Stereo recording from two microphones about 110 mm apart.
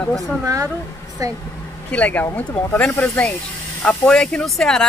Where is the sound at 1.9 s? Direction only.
15° left (ahead or behind).